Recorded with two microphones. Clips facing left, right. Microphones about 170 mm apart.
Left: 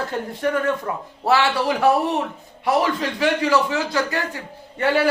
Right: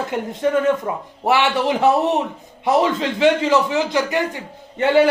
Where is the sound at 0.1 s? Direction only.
20° right (ahead or behind).